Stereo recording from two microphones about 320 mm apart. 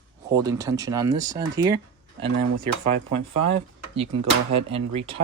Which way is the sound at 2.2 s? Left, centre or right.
Right.